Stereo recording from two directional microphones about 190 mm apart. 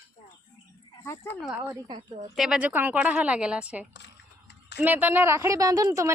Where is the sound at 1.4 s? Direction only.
5° right (ahead or behind).